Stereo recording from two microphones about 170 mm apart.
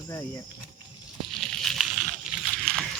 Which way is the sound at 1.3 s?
Centre (ahead or behind).